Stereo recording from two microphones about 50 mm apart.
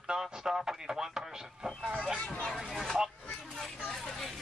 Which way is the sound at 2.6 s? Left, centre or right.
Centre.